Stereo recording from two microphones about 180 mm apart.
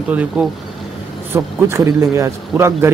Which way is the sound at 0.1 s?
10° right (ahead or behind).